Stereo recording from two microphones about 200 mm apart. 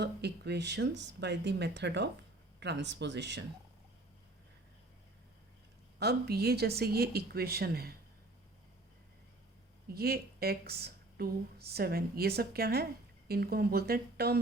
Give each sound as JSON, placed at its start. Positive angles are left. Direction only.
{"t": 0.0, "sound": "speech", "side_deg": -55}
{"t": 6.0, "sound": "speech", "side_deg": -55}
{"t": 9.9, "sound": "speech", "side_deg": -50}